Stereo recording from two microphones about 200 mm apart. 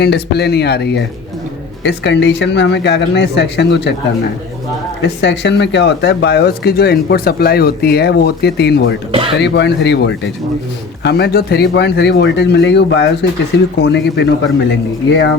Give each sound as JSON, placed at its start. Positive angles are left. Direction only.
{"t": 0.0, "sound": "speech", "side_deg": 55}
{"t": 5.0, "sound": "speech", "side_deg": 60}